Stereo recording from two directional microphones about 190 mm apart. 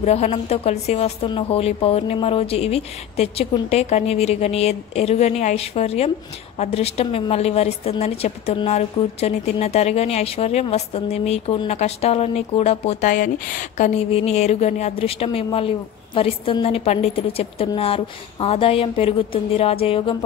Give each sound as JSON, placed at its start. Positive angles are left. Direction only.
{"t": 0.0, "sound": "a woman's voice", "side_deg": 35}